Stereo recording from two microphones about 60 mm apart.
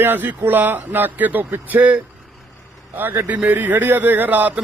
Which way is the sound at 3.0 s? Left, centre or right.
Right.